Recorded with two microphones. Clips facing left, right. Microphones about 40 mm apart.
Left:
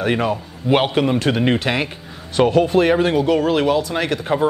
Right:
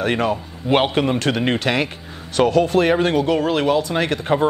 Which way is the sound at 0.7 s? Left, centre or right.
Centre.